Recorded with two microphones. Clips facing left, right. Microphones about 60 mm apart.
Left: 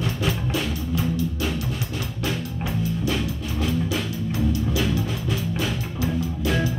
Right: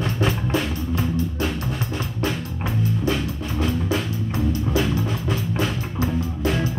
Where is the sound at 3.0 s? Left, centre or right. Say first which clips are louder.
Right 2 dB; right.